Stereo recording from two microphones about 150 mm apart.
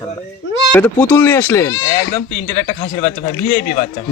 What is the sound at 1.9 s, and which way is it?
Speech, 55° left (ahead or behind).